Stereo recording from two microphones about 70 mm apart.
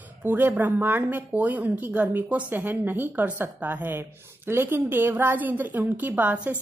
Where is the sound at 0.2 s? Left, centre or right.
Right.